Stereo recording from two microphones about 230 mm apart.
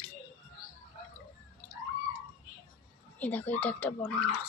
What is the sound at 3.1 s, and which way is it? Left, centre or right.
Speech, centre.